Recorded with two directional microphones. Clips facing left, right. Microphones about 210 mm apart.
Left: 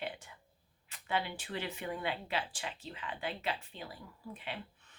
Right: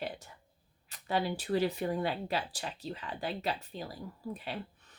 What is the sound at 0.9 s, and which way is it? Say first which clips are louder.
Speech: right 4 dB; 40° right (ahead or behind).